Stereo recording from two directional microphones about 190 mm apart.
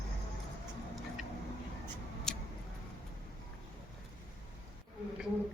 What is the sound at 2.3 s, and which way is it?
Tick-tock, centre (ahead or behind).